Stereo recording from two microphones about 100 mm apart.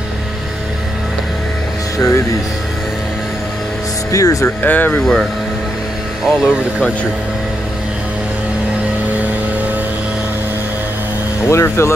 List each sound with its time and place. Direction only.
2.0 s speech: 30° left (ahead or behind)
4.1 s speech: 35° left (ahead or behind)
4.6 s speech: 20° left (ahead or behind)
5.0 s speech: 5° left (ahead or behind)
11.4 s speech: 25° left (ahead or behind)